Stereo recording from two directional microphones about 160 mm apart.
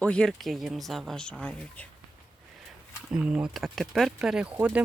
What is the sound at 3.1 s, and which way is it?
Speech, 5° right (ahead or behind).